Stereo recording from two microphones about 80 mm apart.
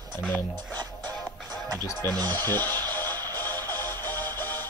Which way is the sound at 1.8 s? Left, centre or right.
Left.